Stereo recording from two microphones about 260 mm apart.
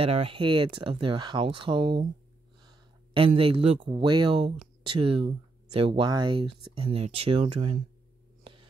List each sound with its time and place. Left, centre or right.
0.0 s speech: right